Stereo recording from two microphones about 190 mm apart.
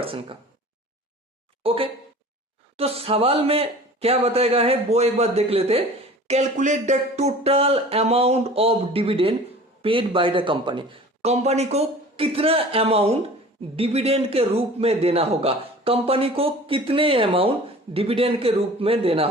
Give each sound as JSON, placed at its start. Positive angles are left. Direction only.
{"t": 0.0, "sound": "speech", "side_deg": -30}
{"t": 1.6, "sound": "a man's voice", "side_deg": -30}